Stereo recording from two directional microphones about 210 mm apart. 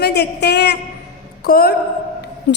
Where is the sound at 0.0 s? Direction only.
55° left (ahead or behind).